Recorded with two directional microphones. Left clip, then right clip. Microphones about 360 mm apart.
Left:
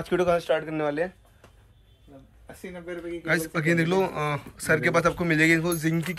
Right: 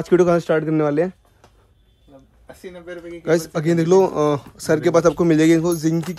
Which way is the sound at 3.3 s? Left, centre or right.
Centre.